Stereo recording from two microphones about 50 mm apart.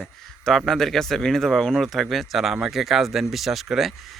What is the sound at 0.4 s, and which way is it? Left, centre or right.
Speech, centre.